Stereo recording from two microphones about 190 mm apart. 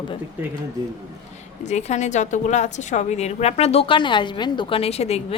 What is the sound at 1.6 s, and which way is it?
A woman's voice, 35° left (ahead or behind).